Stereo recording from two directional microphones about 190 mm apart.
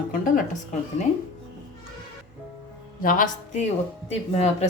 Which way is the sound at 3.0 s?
45° left (ahead or behind).